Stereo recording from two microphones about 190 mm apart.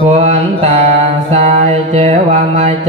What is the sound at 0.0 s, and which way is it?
Mantra, 35° right (ahead or behind).